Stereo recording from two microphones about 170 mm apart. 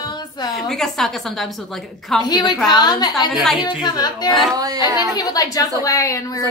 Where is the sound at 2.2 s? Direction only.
25° left (ahead or behind).